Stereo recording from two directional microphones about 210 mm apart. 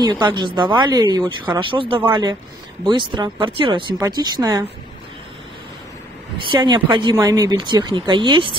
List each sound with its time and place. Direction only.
0.0 s a woman's voice: 20° right (ahead or behind)
6.4 s a woman's voice: 20° right (ahead or behind)